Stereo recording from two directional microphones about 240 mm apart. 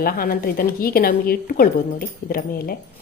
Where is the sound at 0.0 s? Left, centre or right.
Left.